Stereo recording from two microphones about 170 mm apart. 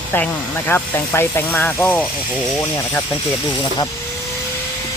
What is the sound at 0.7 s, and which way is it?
Speech, 15° left (ahead or behind).